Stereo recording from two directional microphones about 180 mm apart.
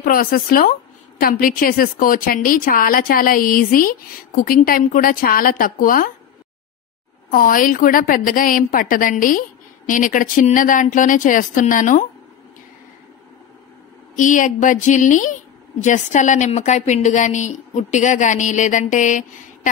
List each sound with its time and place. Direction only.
0.0 s a woman's voice: 50° left (ahead or behind)
7.2 s a woman's voice: 50° left (ahead or behind)
14.1 s a woman's voice: 45° left (ahead or behind)